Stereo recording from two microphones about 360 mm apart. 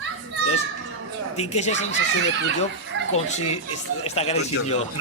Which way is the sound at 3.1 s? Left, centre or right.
Centre.